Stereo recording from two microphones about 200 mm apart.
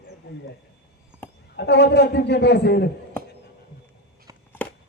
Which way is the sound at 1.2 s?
10° left (ahead or behind).